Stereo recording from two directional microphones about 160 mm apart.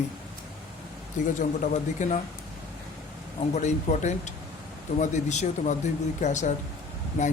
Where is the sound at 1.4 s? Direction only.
50° left (ahead or behind).